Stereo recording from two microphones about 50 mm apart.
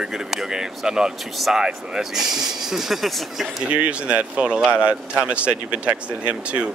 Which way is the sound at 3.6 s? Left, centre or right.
Right.